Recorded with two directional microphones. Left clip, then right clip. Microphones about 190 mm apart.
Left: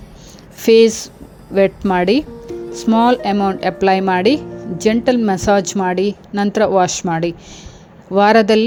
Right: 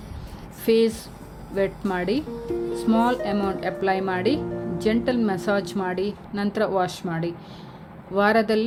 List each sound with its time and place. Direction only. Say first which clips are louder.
0.6 s a woman's voice: left 10 dB; 40° left (ahead or behind)